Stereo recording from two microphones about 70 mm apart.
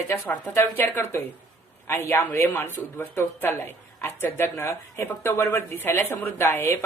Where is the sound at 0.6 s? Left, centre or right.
Left.